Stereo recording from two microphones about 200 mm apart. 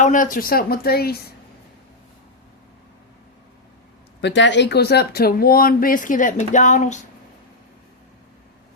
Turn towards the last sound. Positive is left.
turn(degrees=35)  # may be behind; listen again after turning